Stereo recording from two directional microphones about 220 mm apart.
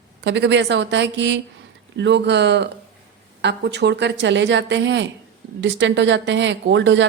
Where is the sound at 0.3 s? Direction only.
55° right (ahead or behind).